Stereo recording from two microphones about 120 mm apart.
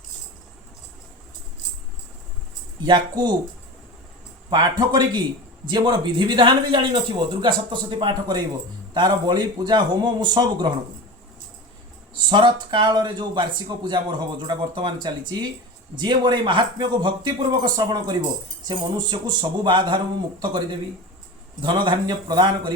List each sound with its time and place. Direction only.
2.8 s speech: 35° right (ahead or behind)
4.4 s speech: 35° right (ahead or behind)
12.3 s speech: 40° right (ahead or behind)
21.6 s speech: 40° right (ahead or behind)